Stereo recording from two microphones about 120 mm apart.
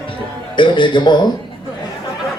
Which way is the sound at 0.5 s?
40° left (ahead or behind).